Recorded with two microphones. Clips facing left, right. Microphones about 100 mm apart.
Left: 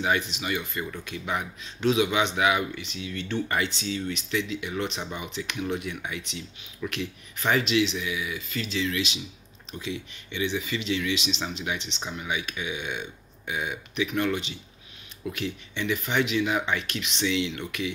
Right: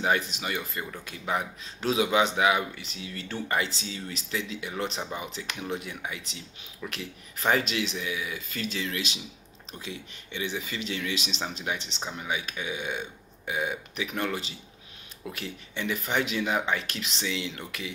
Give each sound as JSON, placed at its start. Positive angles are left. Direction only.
{"t": 0.0, "sound": "speech", "side_deg": -35}